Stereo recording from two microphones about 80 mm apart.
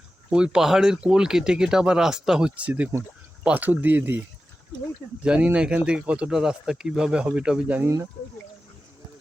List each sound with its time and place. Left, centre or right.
0.3 s speech: centre
5.2 s speech: centre